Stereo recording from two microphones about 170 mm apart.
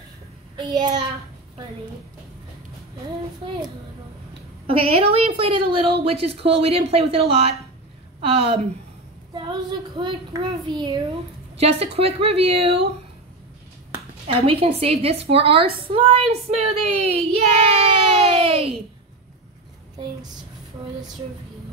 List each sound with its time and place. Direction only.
0.6 s a child's voice: 25° right (ahead or behind)
4.6 s a woman's voice: 35° right (ahead or behind)
14.2 s a woman's voice: 35° right (ahead or behind)